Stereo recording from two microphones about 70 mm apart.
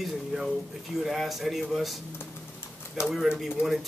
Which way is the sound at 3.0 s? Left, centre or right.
Centre.